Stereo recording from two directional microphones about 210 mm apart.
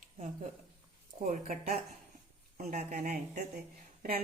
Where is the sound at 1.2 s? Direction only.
40° right (ahead or behind).